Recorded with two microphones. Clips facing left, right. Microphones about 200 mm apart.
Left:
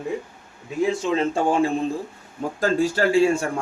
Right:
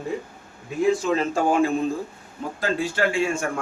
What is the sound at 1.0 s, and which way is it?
Speech, 30° left (ahead or behind).